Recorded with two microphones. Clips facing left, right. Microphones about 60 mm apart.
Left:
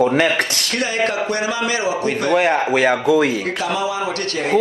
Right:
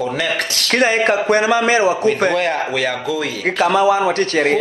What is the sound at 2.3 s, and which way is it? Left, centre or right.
Speech, centre.